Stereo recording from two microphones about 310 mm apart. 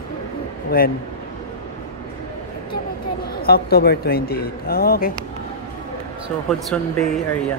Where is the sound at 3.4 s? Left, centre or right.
Left.